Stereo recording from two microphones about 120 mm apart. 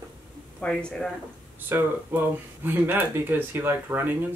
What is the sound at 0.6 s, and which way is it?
Speech, 10° left (ahead or behind).